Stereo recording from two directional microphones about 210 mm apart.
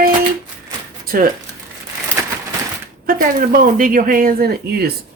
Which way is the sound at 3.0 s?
40° right (ahead or behind).